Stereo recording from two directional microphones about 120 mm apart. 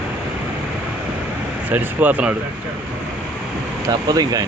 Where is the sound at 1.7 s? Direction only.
15° right (ahead or behind).